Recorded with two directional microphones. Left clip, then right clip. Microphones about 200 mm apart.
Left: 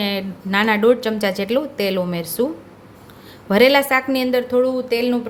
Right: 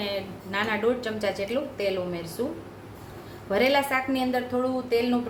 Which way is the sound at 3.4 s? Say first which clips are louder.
Left 9 dB; 50° left (ahead or behind).